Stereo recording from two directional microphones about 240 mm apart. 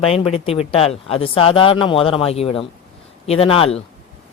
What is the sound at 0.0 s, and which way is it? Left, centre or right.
Speech, left.